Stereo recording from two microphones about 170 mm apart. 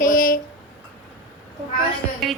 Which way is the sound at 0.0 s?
55° left (ahead or behind).